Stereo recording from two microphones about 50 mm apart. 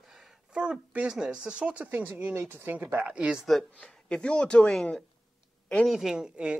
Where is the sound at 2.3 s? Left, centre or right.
Right.